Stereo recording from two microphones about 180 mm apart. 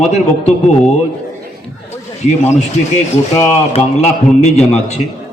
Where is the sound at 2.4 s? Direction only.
40° left (ahead or behind).